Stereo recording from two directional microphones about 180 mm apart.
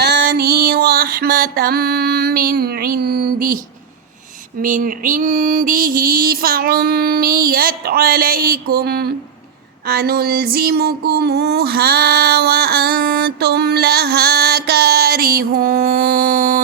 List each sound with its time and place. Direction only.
0.0 s music: 65° right (ahead or behind); by 3.6 s 50° right (ahead or behind)
4.6 s mantra: 50° right (ahead or behind)
9.8 s a sound: 60° right (ahead or behind)